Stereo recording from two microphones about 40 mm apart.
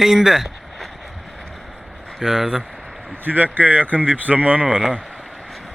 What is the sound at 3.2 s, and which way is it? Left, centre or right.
Speech, right.